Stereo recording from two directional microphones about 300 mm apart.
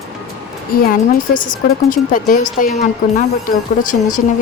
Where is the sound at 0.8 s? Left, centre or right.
Left.